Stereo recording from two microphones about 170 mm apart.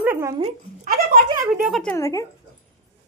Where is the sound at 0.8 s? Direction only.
55° right (ahead or behind).